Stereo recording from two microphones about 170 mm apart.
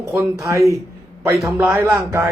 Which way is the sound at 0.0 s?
15° right (ahead or behind).